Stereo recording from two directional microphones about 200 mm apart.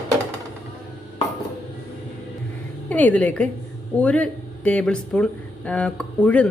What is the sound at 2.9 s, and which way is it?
A woman's voice, 5° left (ahead or behind).